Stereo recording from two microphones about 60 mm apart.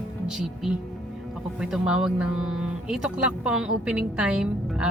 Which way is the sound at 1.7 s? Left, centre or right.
Centre.